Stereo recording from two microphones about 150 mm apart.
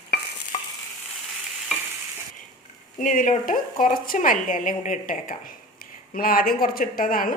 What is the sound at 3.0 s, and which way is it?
A woman's voice, 60° left (ahead or behind).